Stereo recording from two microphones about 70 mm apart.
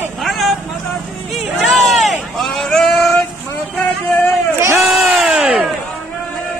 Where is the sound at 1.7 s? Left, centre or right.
Centre.